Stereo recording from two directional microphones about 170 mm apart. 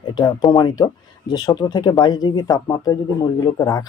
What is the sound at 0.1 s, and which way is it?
Speech, 25° left (ahead or behind).